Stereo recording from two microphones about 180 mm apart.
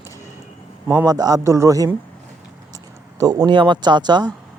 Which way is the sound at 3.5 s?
25° right (ahead or behind).